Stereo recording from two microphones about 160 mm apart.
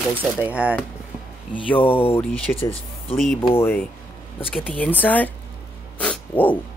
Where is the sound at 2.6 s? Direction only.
35° left (ahead or behind).